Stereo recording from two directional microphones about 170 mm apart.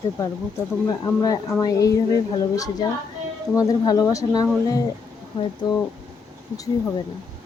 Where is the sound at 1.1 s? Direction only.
20° left (ahead or behind).